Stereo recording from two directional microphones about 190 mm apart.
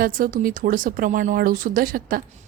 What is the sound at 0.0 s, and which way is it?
Speech, 45° right (ahead or behind).